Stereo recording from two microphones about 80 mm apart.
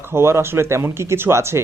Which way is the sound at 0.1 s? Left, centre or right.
Right.